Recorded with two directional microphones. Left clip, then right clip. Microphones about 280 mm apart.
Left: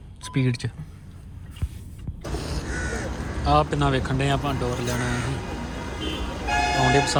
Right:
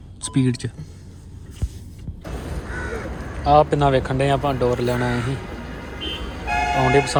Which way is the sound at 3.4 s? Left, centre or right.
Centre.